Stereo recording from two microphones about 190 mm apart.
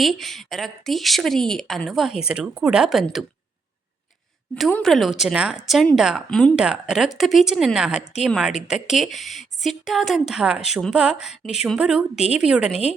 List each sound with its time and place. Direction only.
0.0 s a woman's voice: centre (ahead or behind)
4.5 s a woman's voice: centre (ahead or behind)